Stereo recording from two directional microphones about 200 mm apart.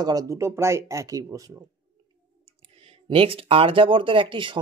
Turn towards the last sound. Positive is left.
turn(degrees=-25)  # may be behind; listen again after turning